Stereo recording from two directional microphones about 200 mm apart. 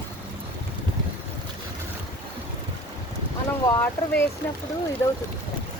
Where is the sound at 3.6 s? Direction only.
15° left (ahead or behind).